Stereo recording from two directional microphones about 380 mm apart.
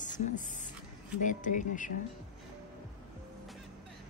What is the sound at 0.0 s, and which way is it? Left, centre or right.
Speech, centre.